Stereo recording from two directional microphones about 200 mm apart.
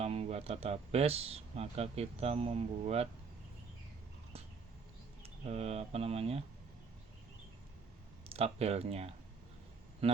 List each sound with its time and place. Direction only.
0.0 s speech: 30° right (ahead or behind)
5.5 s speech: 30° right (ahead or behind)
8.3 s speech: 30° right (ahead or behind)